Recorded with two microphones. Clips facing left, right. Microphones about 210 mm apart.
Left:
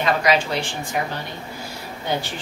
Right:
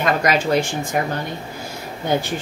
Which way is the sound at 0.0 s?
45° right (ahead or behind).